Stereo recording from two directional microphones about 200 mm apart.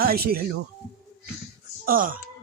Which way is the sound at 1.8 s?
45° right (ahead or behind).